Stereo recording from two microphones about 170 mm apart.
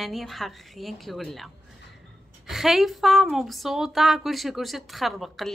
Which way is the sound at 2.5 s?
Centre (ahead or behind).